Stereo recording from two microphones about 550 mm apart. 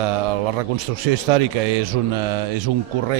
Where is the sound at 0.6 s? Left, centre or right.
Right.